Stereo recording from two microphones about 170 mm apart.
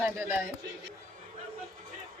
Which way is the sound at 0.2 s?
15° right (ahead or behind).